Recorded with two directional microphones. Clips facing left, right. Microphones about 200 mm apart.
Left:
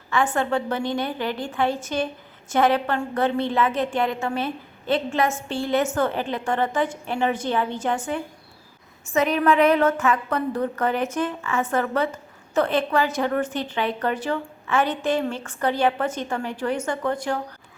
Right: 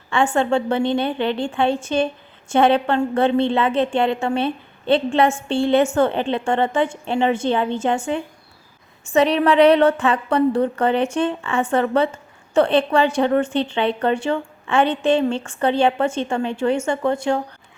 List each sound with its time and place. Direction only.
0.3 s a woman's voice: 25° right (ahead or behind)